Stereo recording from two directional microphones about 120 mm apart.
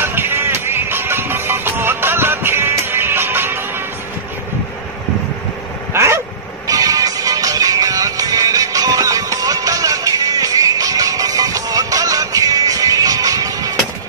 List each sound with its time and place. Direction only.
0.0 s music: 20° right (ahead or behind)
5.9 s dog: 20° right (ahead or behind)
6.7 s music: 30° right (ahead or behind)